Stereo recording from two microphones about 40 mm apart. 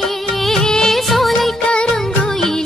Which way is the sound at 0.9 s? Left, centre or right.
Centre.